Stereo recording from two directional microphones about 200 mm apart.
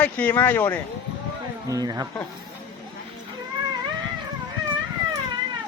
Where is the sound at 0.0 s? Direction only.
10° left (ahead or behind).